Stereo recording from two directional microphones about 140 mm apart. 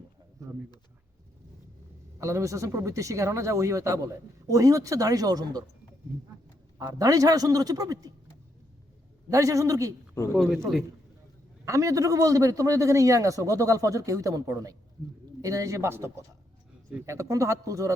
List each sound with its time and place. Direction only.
2.1 s speech: 20° right (ahead or behind)
6.7 s speech: 25° right (ahead or behind)
9.3 s speech: 20° right (ahead or behind)
10.3 s speech: centre (ahead or behind)
11.6 s speech: 20° right (ahead or behind)